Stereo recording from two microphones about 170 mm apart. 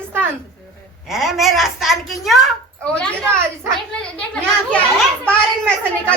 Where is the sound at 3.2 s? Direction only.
15° right (ahead or behind).